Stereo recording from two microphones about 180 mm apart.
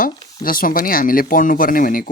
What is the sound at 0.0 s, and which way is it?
Speech, 50° left (ahead or behind).